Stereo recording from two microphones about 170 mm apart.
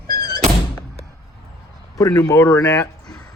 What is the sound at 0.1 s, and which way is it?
Thunk, 65° right (ahead or behind).